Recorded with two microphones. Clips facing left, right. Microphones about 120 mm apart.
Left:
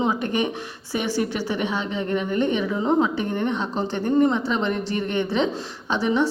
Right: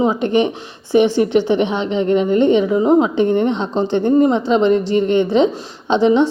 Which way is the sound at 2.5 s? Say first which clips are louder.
Right 8 dB; 15° right (ahead or behind).